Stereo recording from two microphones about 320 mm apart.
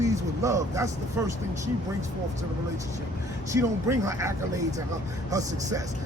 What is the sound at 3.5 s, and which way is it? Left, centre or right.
Speech, centre.